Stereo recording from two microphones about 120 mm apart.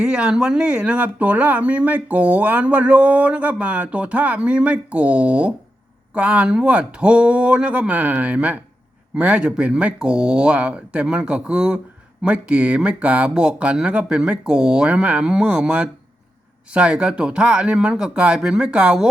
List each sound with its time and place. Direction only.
0.0 s speech: 10° right (ahead or behind)